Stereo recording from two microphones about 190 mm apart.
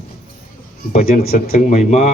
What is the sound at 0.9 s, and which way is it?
A man's voice, 40° left (ahead or behind).